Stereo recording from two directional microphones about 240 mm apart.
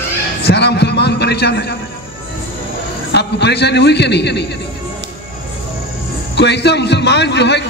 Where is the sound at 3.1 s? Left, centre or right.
Left.